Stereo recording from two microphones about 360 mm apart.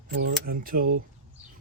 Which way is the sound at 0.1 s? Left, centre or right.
Right.